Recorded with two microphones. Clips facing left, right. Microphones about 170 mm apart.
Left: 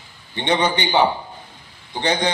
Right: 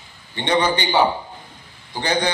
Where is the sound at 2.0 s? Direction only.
20° left (ahead or behind).